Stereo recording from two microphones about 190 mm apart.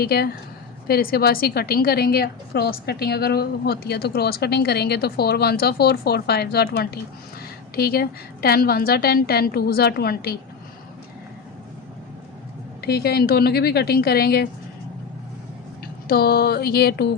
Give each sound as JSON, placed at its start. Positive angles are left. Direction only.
{"t": 0.0, "sound": "a woman's voice", "side_deg": 55}
{"t": 12.8, "sound": "a woman's voice", "side_deg": 55}
{"t": 16.0, "sound": "a sound", "side_deg": 55}